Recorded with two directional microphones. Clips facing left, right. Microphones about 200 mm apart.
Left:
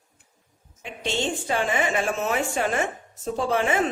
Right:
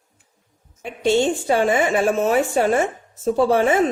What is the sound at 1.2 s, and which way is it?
Speech, 40° right (ahead or behind).